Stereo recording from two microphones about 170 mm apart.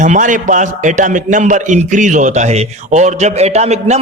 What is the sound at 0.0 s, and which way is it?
A man's voice, 50° right (ahead or behind).